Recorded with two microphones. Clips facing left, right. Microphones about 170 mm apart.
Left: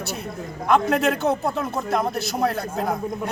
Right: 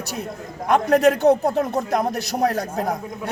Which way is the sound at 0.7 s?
45° right (ahead or behind).